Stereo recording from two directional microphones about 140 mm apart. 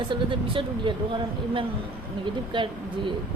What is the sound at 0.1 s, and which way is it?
Speech, 40° right (ahead or behind).